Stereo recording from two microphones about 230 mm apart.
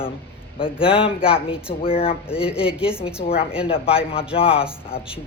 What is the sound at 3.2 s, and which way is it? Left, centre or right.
Speech, left.